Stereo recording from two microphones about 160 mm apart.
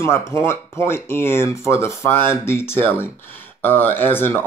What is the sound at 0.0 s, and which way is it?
Speech, 15° left (ahead or behind).